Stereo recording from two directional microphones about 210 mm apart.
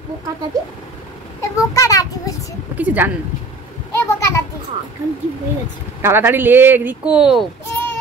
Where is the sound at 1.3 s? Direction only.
15° left (ahead or behind).